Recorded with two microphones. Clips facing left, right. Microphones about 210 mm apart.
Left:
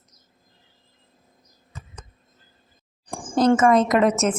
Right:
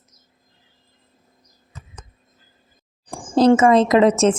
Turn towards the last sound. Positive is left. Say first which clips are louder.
# right 5 dB
turn(degrees=-30)  # may be behind; listen again after turning